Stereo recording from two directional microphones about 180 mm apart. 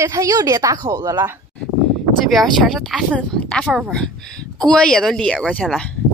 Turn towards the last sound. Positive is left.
turn(degrees=5)  # may be behind; listen again after turning